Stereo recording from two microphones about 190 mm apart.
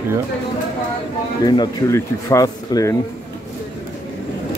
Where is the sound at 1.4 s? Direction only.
20° left (ahead or behind).